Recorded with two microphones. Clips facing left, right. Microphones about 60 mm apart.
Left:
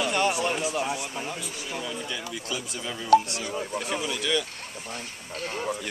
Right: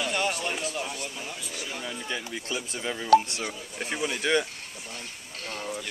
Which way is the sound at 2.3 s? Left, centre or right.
Right.